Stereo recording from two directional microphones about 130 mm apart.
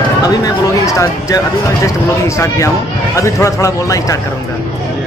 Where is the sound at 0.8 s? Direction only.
25° left (ahead or behind).